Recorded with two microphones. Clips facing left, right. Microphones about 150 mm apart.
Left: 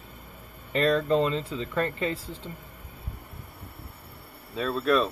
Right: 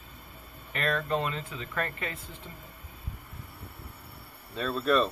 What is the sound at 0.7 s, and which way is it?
Speech, 30° left (ahead or behind).